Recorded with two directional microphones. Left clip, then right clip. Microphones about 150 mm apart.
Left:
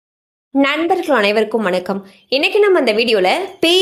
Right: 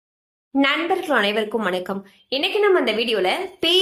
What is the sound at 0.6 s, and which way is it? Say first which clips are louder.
A woman's voice: left 5 dB; 35° left (ahead or behind).